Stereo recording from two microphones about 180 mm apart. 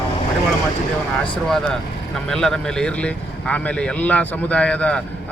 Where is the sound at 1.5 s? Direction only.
Centre (ahead or behind).